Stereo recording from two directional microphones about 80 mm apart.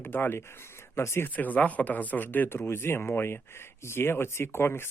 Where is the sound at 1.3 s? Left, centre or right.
Left.